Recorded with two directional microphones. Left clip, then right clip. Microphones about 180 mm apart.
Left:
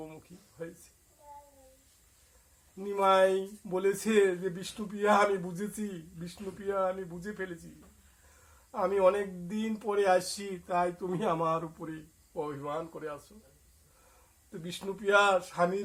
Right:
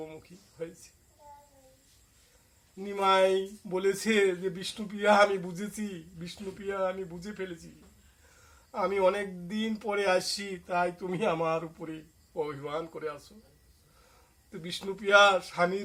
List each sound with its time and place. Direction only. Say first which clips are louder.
2.7 s speech: even; 15° right (ahead or behind)
8.7 s speech: left 1 dB; 15° right (ahead or behind)
14.5 s speech: right 2 dB; 15° right (ahead or behind)